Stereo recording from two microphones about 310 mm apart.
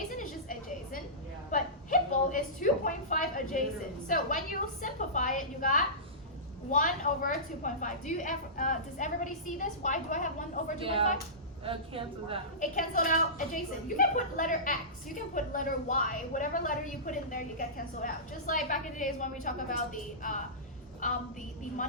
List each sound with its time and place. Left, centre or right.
1.5 s a sound: left
4.1 s a woman's voice: left
10.8 s speech: centre
12.5 s a woman's voice: left